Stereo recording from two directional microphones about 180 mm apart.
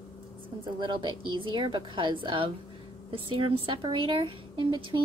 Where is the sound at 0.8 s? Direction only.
25° right (ahead or behind).